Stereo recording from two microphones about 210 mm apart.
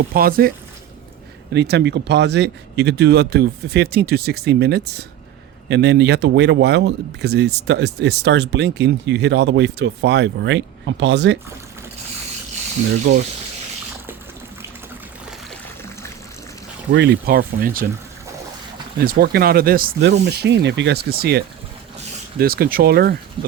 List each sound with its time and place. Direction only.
0.1 s speech: 45° right (ahead or behind)
1.5 s speech: 55° right (ahead or behind)
16.9 s speech: 55° right (ahead or behind)
18.9 s speech: 45° right (ahead or behind)
23.4 s speech: 25° right (ahead or behind)